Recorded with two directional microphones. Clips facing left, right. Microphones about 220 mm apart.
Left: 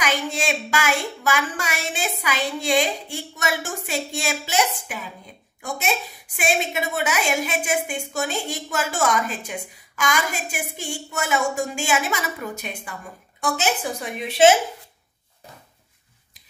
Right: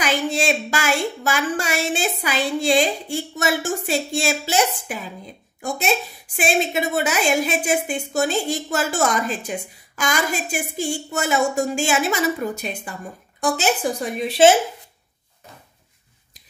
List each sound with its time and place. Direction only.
0.0 s a woman's voice: 30° right (ahead or behind)